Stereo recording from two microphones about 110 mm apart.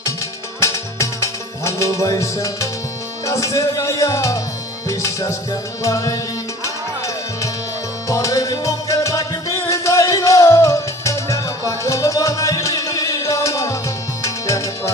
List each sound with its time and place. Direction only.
0.6 s music: 25° left (ahead or behind)
8.0 s music: 30° left (ahead or behind)